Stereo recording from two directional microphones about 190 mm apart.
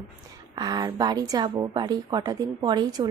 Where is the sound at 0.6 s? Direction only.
20° right (ahead or behind).